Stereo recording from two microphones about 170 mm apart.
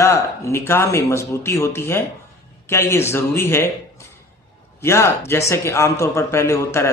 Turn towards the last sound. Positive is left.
turn(degrees=15)  # may be behind; listen again after turning